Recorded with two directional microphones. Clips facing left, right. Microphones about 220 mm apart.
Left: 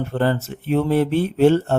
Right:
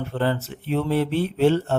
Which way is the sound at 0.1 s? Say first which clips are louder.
Left 2 dB; 45° left (ahead or behind).